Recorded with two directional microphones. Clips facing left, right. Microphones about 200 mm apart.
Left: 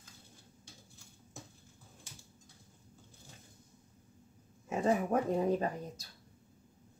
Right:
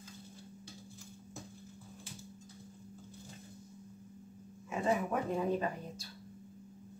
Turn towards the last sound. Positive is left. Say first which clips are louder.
# left 1 dB
turn(degrees=40)  # may be behind; listen again after turning